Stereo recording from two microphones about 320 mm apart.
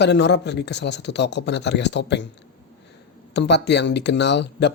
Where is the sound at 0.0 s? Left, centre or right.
Left.